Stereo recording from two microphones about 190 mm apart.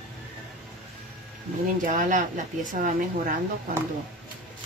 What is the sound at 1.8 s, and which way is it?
Speech, 45° right (ahead or behind).